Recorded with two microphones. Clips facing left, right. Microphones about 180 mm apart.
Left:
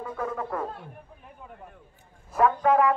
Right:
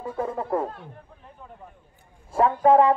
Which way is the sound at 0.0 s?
30° right (ahead or behind).